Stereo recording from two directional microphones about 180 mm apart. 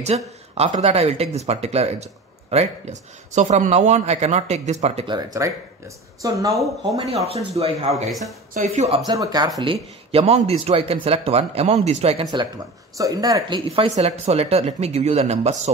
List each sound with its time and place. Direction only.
0.0 s a man's voice: 35° right (ahead or behind); by 6.6 s 20° right (ahead or behind)
6.6 s speech: centre (ahead or behind)
7.5 s a man's voice: 35° right (ahead or behind)
9.0 s a man's voice: 20° right (ahead or behind)
12.9 s speech: 20° right (ahead or behind)
13.7 s a man's voice: 35° right (ahead or behind)